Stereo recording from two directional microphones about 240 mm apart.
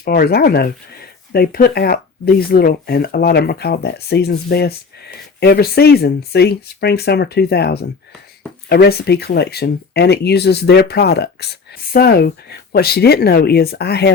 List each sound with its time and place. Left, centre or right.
0.0 s speech: left